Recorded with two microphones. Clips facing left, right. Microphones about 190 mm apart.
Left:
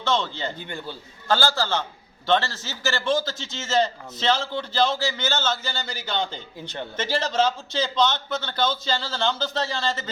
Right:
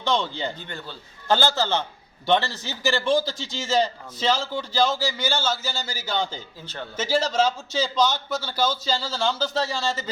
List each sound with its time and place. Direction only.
0.0 s a man's voice: 15° right (ahead or behind)